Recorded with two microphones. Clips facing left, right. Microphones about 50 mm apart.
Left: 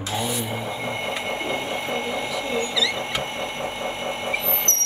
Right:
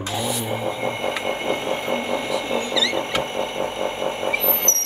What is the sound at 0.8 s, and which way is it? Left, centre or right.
Vehicle, centre.